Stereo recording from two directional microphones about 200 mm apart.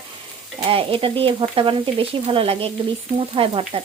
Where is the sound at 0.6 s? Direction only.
25° right (ahead or behind).